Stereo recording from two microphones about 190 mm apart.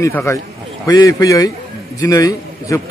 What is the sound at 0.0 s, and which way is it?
A man's voice, 15° left (ahead or behind).